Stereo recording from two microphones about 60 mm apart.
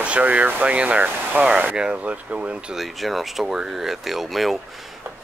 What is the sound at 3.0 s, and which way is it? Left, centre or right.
Speech, centre.